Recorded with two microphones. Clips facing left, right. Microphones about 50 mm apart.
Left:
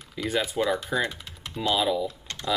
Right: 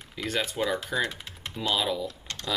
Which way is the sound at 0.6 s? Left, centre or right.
Centre.